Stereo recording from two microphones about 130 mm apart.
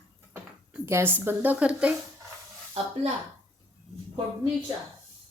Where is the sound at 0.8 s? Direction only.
20° right (ahead or behind).